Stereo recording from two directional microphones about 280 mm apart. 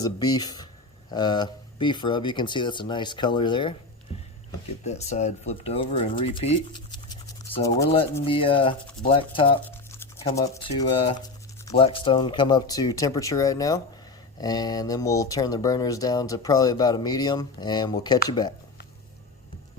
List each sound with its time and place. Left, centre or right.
0.0 s speech: centre
4.9 s speech: left